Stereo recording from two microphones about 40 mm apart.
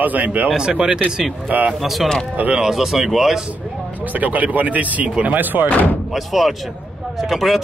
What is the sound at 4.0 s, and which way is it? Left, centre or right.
Speech, right.